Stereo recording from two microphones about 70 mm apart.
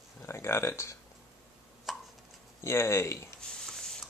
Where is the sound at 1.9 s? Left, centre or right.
Centre.